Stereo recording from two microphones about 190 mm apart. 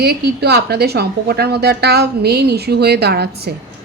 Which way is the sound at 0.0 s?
60° right (ahead or behind).